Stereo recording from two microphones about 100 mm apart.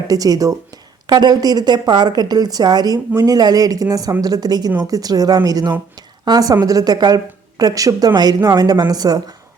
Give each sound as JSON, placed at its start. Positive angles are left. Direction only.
{"t": 0.1, "sound": "a woman's voice", "side_deg": -40}